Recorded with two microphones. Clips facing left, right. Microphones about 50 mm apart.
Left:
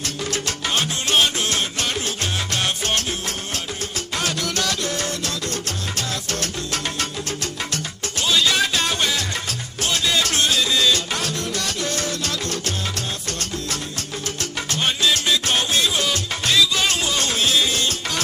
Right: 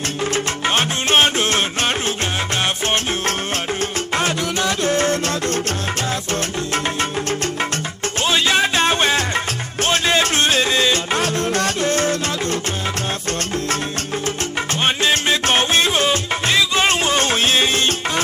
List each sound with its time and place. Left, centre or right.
0.3 s music: right
4.5 s music: right
7.0 s music: right
14.8 s music: right